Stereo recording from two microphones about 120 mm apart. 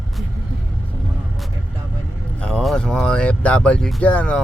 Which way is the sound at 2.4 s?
5° left (ahead or behind).